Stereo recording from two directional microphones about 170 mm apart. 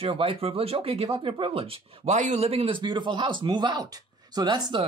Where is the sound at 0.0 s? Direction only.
35° right (ahead or behind).